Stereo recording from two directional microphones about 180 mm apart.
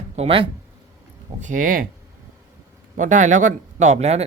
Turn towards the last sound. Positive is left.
turn(degrees=-35)  # may be behind; listen again after turning